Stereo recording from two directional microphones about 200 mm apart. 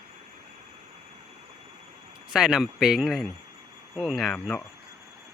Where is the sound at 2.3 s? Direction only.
5° right (ahead or behind).